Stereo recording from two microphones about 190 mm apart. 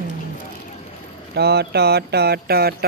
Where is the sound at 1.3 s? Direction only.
60° right (ahead or behind).